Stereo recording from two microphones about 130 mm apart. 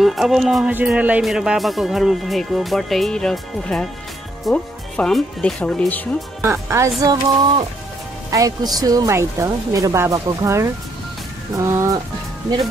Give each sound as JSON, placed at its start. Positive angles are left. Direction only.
{"t": 0.0, "sound": "speech", "side_deg": 0}
{"t": 0.7, "sound": "speech", "side_deg": -10}
{"t": 6.4, "sound": "a woman's voice", "side_deg": -20}